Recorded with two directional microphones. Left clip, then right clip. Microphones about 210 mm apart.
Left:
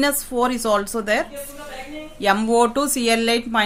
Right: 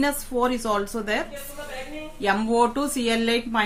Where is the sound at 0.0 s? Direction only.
50° left (ahead or behind).